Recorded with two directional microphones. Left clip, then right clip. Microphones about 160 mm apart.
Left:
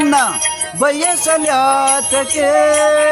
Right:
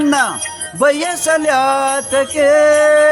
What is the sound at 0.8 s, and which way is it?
Music, centre (ahead or behind).